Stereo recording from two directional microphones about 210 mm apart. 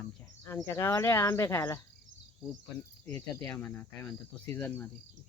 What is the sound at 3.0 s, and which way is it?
Cricket, 15° left (ahead or behind).